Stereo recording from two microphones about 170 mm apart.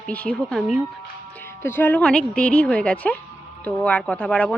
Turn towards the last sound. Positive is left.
turn(degrees=5)  # may be behind; listen again after turning